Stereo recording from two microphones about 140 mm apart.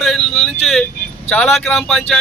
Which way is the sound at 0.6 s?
Centre (ahead or behind).